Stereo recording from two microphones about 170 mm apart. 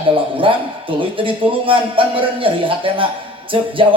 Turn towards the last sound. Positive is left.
turn(degrees=-30)  # may be behind; listen again after turning